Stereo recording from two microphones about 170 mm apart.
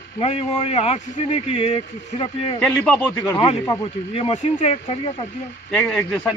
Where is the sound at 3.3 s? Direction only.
30° left (ahead or behind).